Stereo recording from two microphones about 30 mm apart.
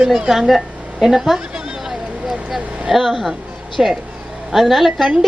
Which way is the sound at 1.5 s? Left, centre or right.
Centre.